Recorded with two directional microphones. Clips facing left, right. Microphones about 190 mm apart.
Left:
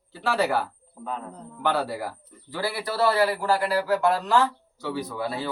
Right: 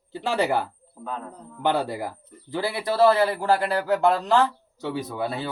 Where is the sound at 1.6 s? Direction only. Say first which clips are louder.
Right 2 dB; 20° right (ahead or behind).